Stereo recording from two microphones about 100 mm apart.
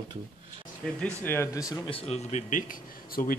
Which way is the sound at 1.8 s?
80° left.